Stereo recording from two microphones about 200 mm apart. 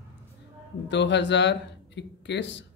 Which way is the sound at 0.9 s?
60° left (ahead or behind).